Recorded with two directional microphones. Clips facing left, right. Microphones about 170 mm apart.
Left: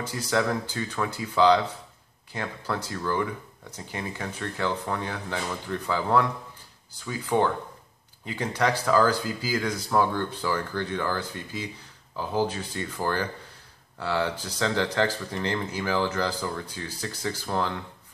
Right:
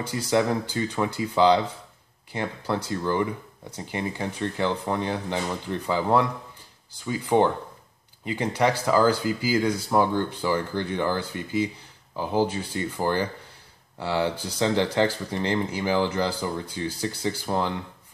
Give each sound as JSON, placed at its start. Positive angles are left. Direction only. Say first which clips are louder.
{"t": 0.0, "sound": "speech", "louder": "right 3 dB", "side_deg": -15}